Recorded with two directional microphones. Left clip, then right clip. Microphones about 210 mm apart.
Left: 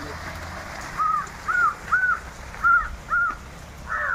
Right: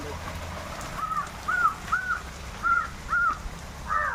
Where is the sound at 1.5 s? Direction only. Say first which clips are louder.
Left 4 dB; 50° right (ahead or behind).